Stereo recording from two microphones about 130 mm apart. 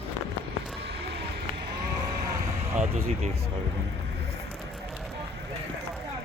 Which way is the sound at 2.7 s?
55° right (ahead or behind).